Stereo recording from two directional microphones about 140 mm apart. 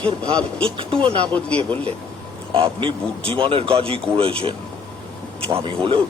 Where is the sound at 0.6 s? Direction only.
40° right (ahead or behind).